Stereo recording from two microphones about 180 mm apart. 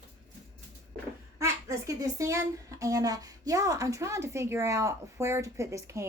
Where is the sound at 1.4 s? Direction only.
15° right (ahead or behind).